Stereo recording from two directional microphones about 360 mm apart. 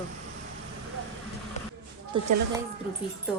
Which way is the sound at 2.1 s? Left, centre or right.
Centre.